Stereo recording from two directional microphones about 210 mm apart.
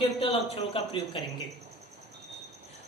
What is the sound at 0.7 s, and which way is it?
Speech, 25° left (ahead or behind).